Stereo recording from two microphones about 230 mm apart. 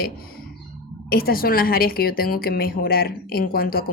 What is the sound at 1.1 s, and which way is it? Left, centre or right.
A woman's voice, left.